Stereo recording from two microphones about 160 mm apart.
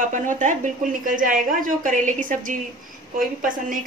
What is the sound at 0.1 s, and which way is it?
A woman's voice, 55° right (ahead or behind).